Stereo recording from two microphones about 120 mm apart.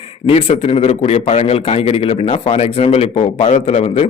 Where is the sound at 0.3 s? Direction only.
55° left (ahead or behind).